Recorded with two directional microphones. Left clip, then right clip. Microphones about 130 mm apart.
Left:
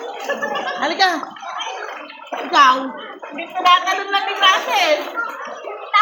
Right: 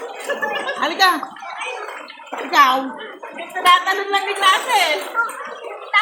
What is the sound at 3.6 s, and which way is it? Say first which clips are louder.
A woman's voice: even; 20° right (ahead or behind).